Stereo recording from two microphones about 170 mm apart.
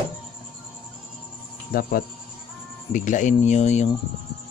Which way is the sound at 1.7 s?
60° left (ahead or behind).